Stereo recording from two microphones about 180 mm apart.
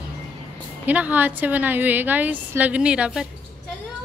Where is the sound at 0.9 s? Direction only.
10° right (ahead or behind).